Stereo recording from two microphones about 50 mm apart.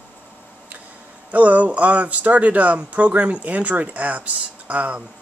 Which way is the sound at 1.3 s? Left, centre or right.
Right.